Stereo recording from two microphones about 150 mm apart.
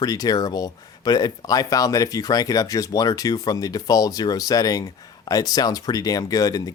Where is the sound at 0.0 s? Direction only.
25° left (ahead or behind).